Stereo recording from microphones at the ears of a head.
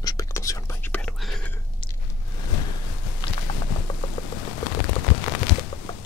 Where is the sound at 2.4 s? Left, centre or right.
Left.